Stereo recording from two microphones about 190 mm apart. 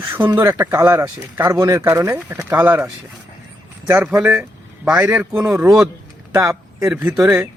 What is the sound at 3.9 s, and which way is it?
A man's voice, 10° right (ahead or behind).